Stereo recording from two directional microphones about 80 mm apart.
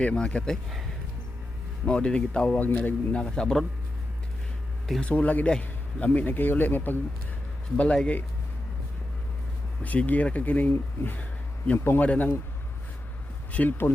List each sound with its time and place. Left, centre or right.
0.0 s speech: centre
0.5 s speech: centre
1.9 s speech: centre
2.6 s speech: left
3.3 s speech: centre
5.0 s speech: centre
9.8 s speech: centre
13.5 s speech: left